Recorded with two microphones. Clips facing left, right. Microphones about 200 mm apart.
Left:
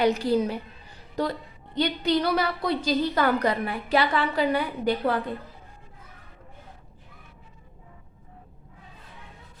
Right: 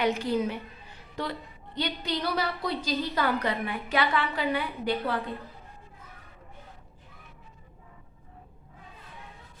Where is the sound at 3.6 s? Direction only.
35° left (ahead or behind).